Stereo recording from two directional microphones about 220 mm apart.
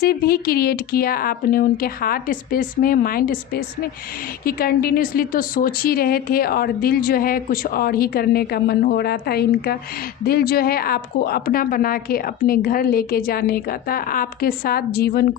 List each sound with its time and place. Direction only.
0.0 s a woman's voice: 45° left (ahead or behind)